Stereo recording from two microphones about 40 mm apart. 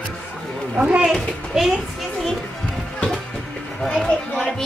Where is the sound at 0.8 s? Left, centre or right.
Centre.